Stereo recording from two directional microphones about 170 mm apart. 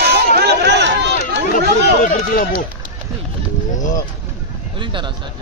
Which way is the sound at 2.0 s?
55° left (ahead or behind).